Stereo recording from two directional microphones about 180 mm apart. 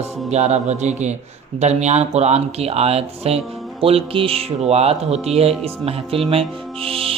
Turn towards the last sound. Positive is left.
turn(degrees=-30)  # may be behind; listen again after turning